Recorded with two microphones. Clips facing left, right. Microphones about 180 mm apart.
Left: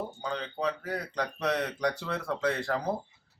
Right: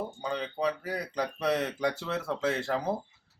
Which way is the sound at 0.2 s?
10° right (ahead or behind).